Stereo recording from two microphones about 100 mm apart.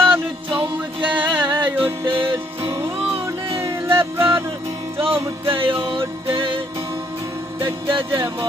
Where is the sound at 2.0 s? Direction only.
60° right (ahead or behind).